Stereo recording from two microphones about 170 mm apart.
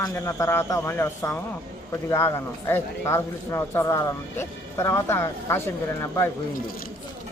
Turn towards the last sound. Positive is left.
turn(degrees=15)  # may be behind; listen again after turning